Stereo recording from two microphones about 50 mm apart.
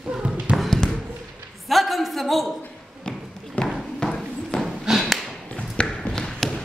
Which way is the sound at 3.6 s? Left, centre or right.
Left.